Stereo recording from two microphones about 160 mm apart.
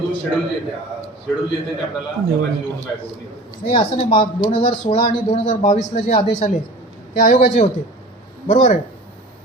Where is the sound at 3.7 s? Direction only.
35° left (ahead or behind).